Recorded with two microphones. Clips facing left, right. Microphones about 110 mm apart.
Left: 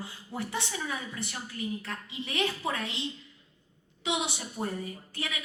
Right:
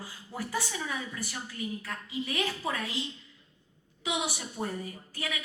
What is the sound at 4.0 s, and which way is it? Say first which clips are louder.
Speech: left 1 dB; 25° left (ahead or behind).